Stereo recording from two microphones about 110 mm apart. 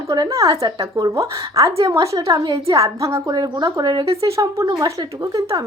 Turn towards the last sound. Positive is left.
turn(degrees=-30)  # may be behind; listen again after turning